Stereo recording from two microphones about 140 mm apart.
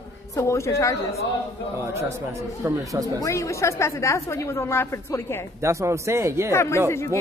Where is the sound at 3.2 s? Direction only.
20° left (ahead or behind).